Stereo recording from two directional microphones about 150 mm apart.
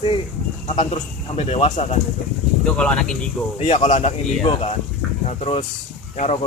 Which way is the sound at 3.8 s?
55° left (ahead or behind).